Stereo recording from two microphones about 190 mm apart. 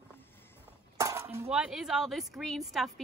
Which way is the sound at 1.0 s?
15° right (ahead or behind).